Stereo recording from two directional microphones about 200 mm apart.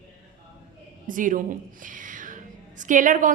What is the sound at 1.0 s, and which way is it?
A woman's voice, 40° right (ahead or behind).